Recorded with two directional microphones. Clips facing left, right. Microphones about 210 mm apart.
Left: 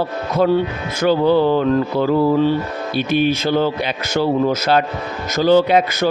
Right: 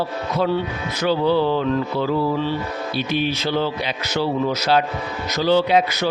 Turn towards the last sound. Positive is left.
turn(degrees=50)  # may be behind; listen again after turning